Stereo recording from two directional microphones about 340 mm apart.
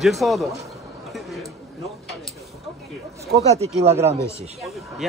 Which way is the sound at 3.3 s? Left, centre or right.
Centre.